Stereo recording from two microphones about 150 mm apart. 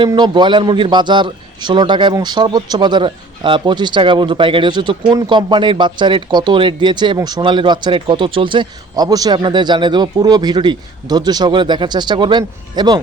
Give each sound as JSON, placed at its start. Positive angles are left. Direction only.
{"t": 0.1, "sound": "a man's voice", "side_deg": -30}